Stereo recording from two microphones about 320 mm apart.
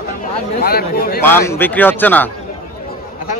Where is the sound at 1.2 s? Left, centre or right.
Centre.